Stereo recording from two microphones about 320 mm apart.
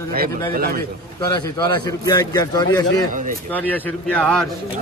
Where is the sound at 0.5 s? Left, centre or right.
Right.